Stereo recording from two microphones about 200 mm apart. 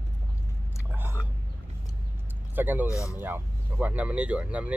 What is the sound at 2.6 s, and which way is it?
Vehicle, 10° right (ahead or behind).